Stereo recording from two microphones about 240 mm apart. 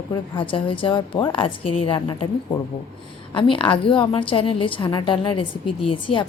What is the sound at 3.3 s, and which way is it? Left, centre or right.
A woman's voice, left.